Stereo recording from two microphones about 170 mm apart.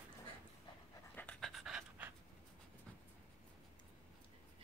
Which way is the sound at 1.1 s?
10° left (ahead or behind).